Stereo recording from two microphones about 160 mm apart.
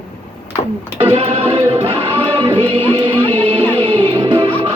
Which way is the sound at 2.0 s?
35° right (ahead or behind).